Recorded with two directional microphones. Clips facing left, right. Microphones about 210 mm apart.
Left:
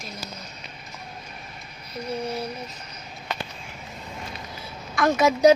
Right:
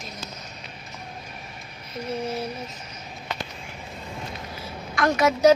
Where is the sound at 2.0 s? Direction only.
Centre (ahead or behind).